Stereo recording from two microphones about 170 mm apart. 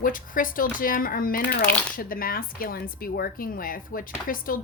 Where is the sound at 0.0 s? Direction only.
55° left (ahead or behind).